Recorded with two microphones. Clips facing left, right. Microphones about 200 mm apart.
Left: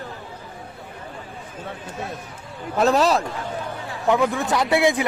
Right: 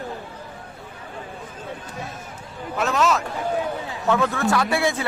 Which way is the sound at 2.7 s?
35° left (ahead or behind).